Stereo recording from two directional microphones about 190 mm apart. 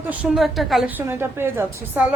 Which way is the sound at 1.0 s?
10° right (ahead or behind).